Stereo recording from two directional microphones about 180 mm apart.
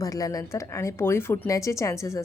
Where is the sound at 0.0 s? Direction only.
20° left (ahead or behind).